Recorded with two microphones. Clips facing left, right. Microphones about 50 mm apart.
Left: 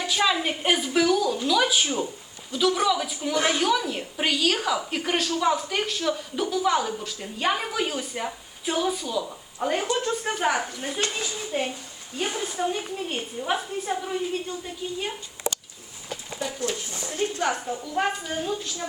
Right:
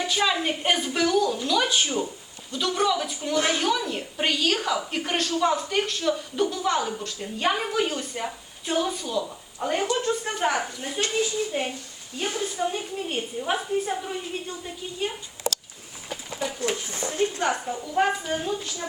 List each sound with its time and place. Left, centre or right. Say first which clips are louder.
0.0 s a woman's voice: even; centre
12.1 s a woman's voice: even; centre
12.6 s a woman's voice: left 1 dB; centre
16.6 s speech: right 2 dB; right
17.2 s a woman's voice: right 1 dB; centre